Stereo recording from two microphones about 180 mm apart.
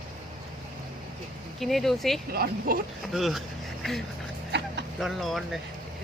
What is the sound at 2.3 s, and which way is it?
Speech, 55° right (ahead or behind).